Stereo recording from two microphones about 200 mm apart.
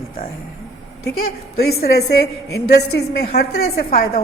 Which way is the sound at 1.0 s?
45° left (ahead or behind).